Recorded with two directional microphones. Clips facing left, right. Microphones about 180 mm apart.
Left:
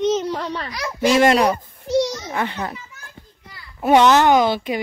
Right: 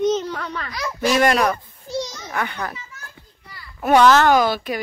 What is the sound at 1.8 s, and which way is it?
Speech, 75° left (ahead or behind).